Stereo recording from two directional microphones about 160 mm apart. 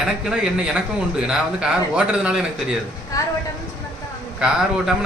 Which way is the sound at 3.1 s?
20° left (ahead or behind).